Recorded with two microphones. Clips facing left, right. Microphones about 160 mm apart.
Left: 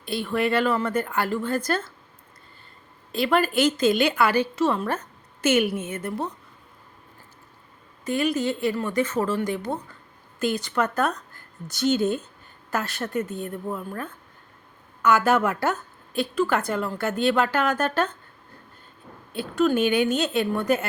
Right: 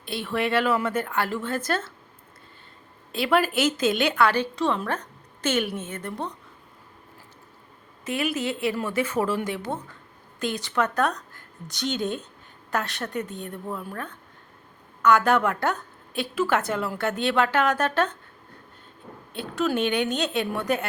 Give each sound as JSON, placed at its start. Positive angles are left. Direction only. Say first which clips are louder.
{"t": 0.0, "sound": "a woman's voice", "louder": "left 2 dB", "side_deg": 0}
{"t": 3.1, "sound": "a woman's voice", "louder": "even", "side_deg": 0}
{"t": 8.0, "sound": "a woman's voice", "louder": "left 3 dB", "side_deg": -5}
{"t": 19.3, "sound": "a woman's voice", "louder": "left 4 dB", "side_deg": 0}